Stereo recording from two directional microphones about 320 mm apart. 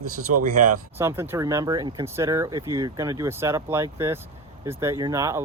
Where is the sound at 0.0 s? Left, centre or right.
Right.